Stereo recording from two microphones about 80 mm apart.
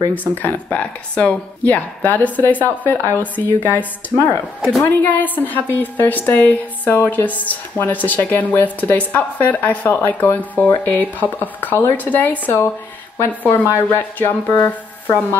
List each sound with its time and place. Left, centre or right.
0.1 s a woman's voice: left
13.7 s a woman's voice: left